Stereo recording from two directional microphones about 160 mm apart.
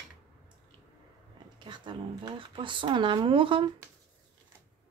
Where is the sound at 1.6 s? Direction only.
30° right (ahead or behind).